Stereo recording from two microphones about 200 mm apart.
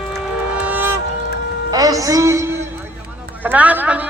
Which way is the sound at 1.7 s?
15° right (ahead or behind).